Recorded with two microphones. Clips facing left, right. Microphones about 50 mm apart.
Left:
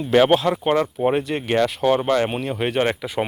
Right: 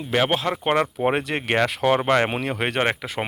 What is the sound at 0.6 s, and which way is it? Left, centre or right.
Speech, right.